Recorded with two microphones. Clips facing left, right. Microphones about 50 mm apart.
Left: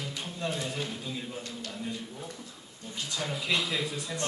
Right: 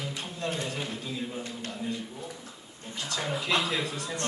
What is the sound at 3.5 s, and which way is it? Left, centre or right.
Speech, right.